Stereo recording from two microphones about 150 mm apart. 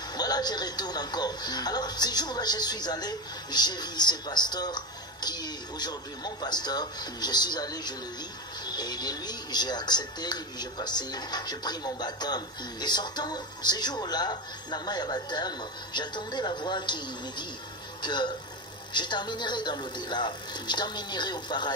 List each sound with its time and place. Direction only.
0.1 s speech: 25° left (ahead or behind)